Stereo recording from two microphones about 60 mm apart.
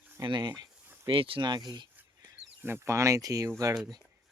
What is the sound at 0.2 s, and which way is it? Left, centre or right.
Speech, right.